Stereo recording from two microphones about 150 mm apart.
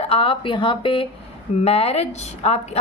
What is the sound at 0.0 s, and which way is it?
A woman's voice, 40° left (ahead or behind).